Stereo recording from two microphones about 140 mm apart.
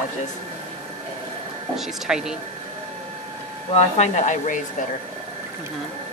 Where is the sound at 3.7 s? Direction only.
55° left (ahead or behind).